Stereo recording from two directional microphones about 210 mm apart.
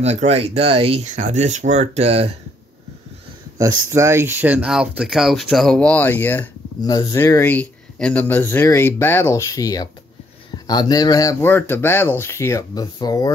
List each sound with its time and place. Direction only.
0.0 s speech: 30° right (ahead or behind)
3.5 s speech: 15° right (ahead or behind); by 13.3 s 15° left (ahead or behind)